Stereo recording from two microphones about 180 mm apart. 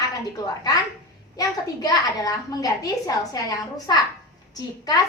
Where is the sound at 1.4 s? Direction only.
20° left (ahead or behind).